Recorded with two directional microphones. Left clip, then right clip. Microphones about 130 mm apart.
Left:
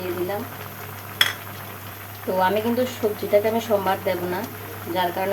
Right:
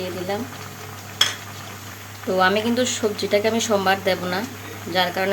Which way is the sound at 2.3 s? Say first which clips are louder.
Right 2 dB; 15° right (ahead or behind).